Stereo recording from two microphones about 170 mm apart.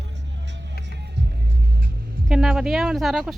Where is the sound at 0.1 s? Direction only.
90° right.